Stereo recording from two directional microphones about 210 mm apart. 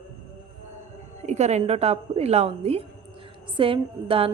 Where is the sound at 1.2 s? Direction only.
35° right (ahead or behind).